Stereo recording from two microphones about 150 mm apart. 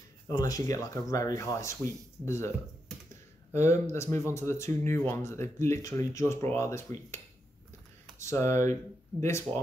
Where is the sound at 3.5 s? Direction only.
20° left (ahead or behind).